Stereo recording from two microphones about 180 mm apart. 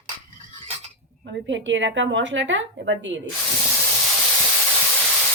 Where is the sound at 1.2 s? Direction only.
90° right.